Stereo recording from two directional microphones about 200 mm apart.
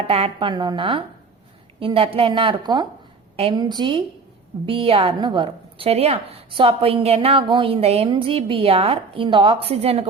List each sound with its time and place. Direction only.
0.0 s a woman's voice: 30° right (ahead or behind)